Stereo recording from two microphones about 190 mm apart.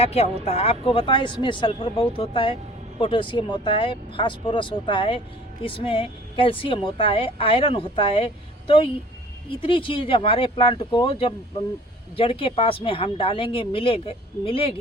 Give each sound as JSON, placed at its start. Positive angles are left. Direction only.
{"t": 0.0, "sound": "speech", "side_deg": 35}